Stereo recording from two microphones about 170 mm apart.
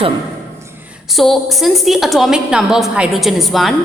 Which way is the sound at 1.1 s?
Centre (ahead or behind).